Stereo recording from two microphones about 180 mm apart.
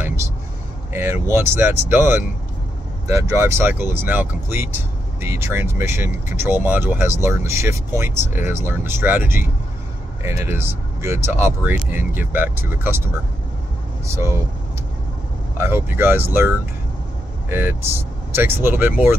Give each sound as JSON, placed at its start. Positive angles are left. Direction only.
{"t": 0.9, "sound": "speech", "side_deg": -15}
{"t": 15.5, "sound": "speech", "side_deg": -15}